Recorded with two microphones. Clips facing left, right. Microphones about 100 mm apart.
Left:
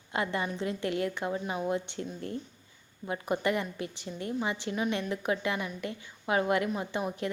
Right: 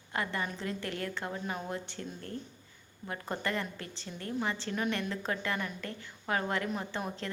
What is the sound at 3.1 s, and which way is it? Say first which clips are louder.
A woman's voice: left 6 dB; 15° left (ahead or behind).